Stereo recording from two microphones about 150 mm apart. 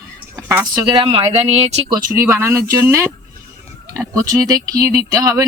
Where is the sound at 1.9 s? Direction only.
15° right (ahead or behind).